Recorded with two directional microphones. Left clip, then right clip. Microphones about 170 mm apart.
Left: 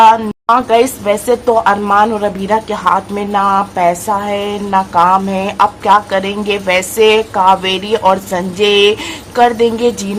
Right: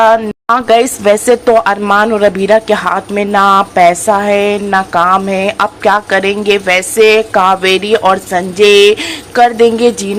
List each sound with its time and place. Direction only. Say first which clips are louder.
0.5 s speech: right 2 dB; 25° right (ahead or behind)